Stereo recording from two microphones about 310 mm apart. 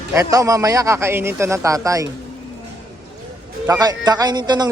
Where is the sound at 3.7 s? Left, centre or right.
Centre.